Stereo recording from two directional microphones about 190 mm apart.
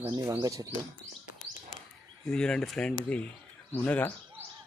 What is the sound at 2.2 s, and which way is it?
Speech, 5° left (ahead or behind).